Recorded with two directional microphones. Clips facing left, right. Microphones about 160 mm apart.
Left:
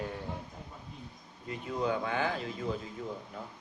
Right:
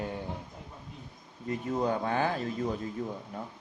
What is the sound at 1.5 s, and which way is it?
Speech, 40° right (ahead or behind).